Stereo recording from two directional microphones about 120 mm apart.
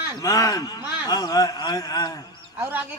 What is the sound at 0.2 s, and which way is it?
Speech, 30° left (ahead or behind).